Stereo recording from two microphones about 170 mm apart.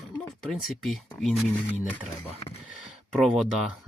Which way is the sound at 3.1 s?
Centre (ahead or behind).